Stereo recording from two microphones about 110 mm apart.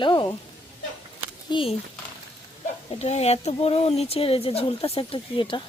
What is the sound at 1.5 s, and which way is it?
Speech, 50° left (ahead or behind).